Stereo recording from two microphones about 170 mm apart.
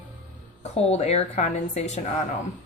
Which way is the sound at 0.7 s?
40° left (ahead or behind).